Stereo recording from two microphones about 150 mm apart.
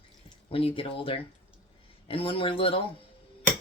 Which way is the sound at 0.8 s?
40° left (ahead or behind).